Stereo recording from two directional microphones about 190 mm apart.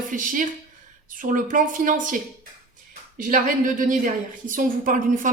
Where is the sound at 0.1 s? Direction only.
45° right (ahead or behind).